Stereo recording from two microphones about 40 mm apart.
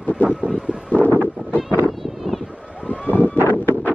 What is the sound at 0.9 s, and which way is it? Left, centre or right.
Wind noise, left.